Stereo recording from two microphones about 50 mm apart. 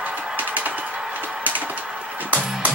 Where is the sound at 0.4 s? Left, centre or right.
Right.